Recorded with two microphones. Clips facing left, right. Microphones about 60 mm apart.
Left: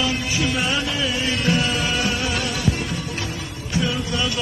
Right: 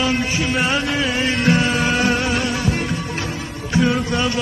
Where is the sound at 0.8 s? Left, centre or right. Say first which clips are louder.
Right 4 dB; right.